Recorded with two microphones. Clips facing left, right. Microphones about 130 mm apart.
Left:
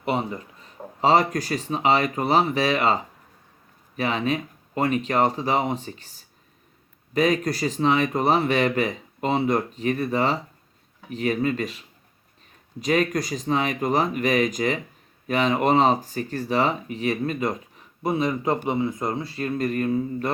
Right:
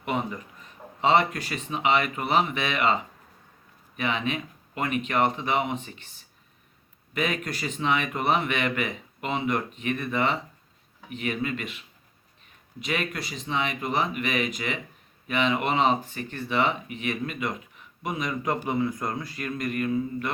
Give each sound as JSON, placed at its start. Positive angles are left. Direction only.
{"t": 0.0, "sound": "speech", "side_deg": 35}